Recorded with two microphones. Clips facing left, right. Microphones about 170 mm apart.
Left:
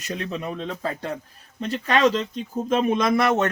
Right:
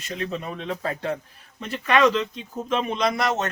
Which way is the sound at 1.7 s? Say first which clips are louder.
Even; 35° left (ahead or behind).